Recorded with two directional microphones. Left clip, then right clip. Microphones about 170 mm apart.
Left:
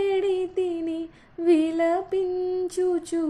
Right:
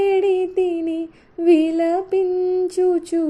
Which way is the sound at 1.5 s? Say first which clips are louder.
Right 5 dB; 20° right (ahead or behind).